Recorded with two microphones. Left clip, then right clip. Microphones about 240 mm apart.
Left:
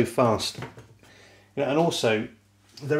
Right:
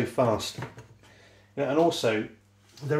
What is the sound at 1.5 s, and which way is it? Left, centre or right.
Speech, left.